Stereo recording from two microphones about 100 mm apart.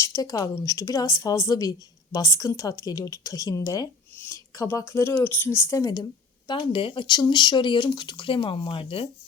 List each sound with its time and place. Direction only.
0.0 s a woman's voice: 35° left (ahead or behind)
4.1 s a sound: 20° left (ahead or behind)
4.8 s a woman's voice: 30° left (ahead or behind)
5.1 s speech: 20° left (ahead or behind)
6.5 s speech: 60° left (ahead or behind)